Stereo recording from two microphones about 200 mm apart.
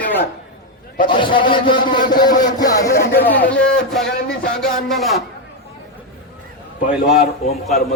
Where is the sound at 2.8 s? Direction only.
45° left (ahead or behind).